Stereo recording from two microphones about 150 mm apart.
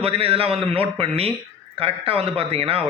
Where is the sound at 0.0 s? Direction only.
40° right (ahead or behind).